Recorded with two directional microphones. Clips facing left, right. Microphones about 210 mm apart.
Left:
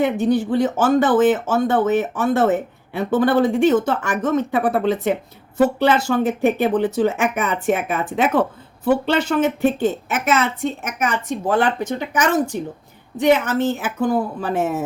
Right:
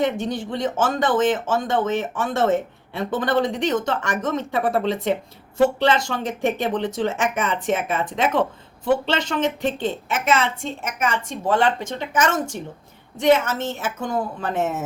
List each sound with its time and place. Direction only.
0.0 s a woman's voice: 5° left (ahead or behind)
14.5 s speech: 20° right (ahead or behind)